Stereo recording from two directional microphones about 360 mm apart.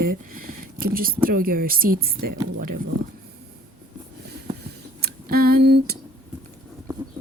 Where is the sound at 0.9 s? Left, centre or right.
Right.